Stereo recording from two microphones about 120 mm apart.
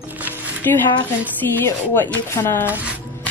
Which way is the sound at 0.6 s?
20° left (ahead or behind).